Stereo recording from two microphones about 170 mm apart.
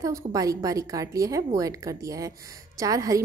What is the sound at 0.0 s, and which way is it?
A woman's voice, 20° right (ahead or behind).